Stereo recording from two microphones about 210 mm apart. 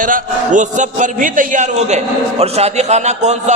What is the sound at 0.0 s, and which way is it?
A man's voice, 40° right (ahead or behind).